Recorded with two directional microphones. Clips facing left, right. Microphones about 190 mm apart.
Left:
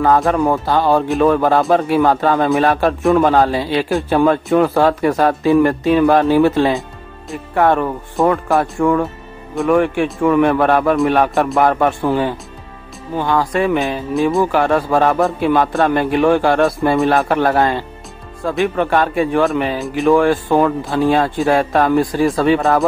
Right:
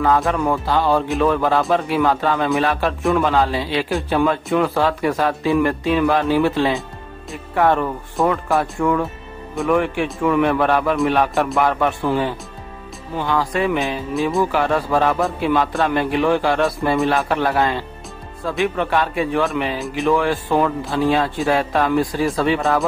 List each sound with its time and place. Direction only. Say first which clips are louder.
0.0 s speech: left 4 dB; 45° left (ahead or behind)